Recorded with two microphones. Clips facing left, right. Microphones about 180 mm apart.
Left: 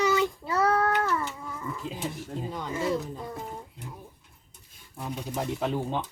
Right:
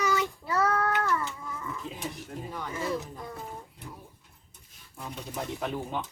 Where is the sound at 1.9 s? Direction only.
30° left (ahead or behind).